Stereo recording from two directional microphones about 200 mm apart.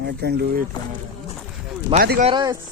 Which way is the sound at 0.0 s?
55° right (ahead or behind).